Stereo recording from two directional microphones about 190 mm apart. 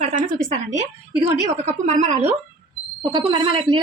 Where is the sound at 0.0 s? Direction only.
40° right (ahead or behind).